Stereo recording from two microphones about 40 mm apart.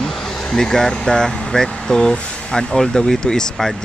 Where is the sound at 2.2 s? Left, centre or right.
Left.